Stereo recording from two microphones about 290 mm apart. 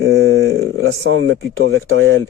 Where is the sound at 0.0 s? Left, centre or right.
Right.